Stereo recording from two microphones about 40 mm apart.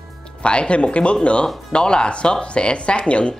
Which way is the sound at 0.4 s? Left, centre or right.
Left.